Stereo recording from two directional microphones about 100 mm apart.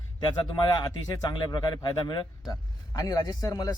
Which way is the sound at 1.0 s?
40° left (ahead or behind).